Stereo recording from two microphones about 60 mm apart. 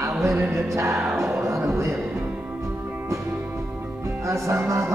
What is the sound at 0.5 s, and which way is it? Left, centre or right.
Speech, right.